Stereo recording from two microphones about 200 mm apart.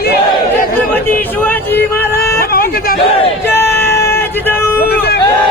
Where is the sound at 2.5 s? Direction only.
50° left (ahead or behind).